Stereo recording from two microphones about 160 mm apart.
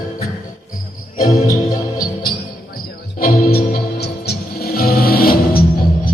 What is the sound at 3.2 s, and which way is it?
Music, 65° left (ahead or behind).